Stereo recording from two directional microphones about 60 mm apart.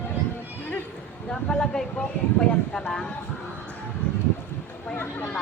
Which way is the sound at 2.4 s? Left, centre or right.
Left.